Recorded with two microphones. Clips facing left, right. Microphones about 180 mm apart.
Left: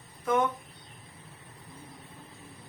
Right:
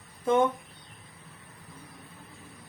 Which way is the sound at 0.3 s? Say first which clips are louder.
Right 3 dB; 25° right (ahead or behind).